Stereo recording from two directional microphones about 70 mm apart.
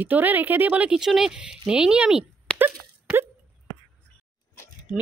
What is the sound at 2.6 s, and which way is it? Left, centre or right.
Wail, right.